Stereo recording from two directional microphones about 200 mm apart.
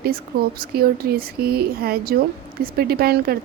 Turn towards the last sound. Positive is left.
turn(degrees=-50)  # may be behind; listen again after turning